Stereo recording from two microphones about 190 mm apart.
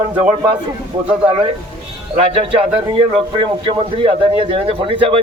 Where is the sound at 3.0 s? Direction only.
30° right (ahead or behind).